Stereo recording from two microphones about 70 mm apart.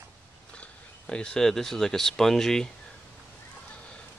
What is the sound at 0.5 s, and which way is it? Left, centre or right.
Speech, centre.